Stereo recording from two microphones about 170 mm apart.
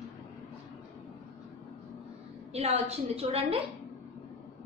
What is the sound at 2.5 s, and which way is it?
A woman's voice, 40° right (ahead or behind).